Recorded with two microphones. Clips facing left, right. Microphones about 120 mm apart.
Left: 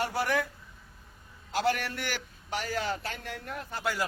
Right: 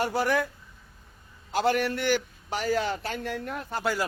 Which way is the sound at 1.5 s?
25° right (ahead or behind).